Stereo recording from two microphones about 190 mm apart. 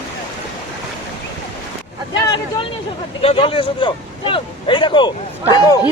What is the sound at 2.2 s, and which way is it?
Speech, 25° left (ahead or behind).